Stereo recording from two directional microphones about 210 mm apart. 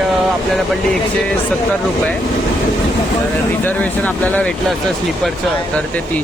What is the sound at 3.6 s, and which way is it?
Speech, 5° left (ahead or behind).